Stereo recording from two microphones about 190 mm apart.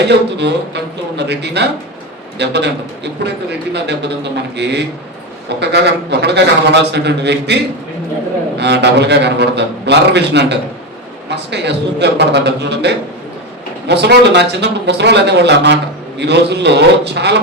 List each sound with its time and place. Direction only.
0.1 s speech: 65° right (ahead or behind)